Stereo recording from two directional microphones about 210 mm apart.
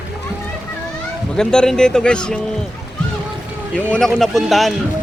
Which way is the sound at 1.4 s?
5° left (ahead or behind).